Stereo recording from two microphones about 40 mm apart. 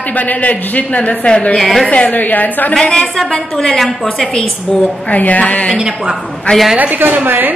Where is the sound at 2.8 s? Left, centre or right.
Centre.